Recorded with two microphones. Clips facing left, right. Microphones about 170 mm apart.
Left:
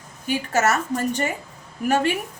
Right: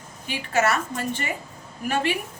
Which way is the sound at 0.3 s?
45° left (ahead or behind).